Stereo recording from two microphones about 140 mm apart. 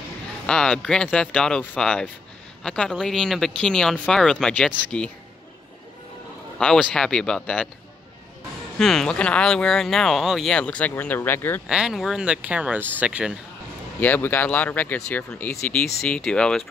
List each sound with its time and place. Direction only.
0.5 s speech: 5° left (ahead or behind)
6.6 s speech: 5° left (ahead or behind)
8.7 s speech: 5° left (ahead or behind)
11.6 s speech: 5° right (ahead or behind)
13.9 s speech: 15° left (ahead or behind)